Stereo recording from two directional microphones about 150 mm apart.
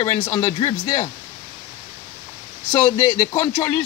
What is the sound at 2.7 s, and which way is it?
Speech, 30° left (ahead or behind).